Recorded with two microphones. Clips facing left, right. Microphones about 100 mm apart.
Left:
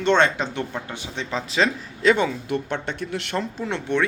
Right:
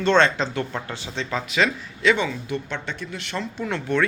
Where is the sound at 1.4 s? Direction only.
35° left (ahead or behind); by 3.3 s 60° left (ahead or behind).